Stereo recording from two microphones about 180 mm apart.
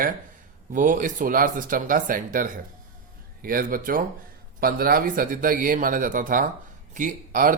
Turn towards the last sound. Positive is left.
turn(degrees=-45)  # may be behind; listen again after turning